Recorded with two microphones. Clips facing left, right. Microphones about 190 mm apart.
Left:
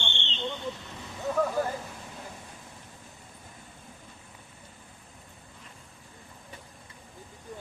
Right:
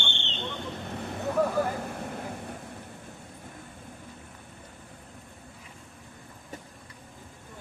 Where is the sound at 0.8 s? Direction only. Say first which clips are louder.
Right 2 dB; 60° right (ahead or behind).